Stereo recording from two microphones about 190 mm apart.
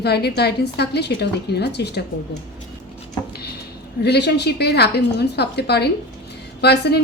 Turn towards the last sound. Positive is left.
turn(degrees=60)  # may be behind; listen again after turning